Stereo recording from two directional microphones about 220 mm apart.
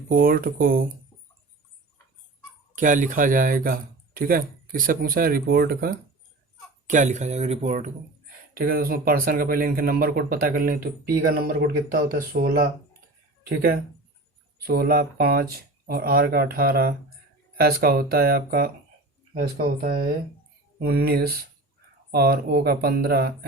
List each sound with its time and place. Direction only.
0.1 s speech: 40° right (ahead or behind)
2.7 s speech: 35° right (ahead or behind)
8.5 s speech: 45° right (ahead or behind)